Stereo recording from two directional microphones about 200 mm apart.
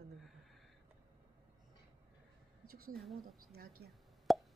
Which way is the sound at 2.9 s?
Centre (ahead or behind).